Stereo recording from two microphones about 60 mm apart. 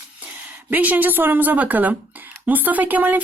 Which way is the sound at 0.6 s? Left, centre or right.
Right.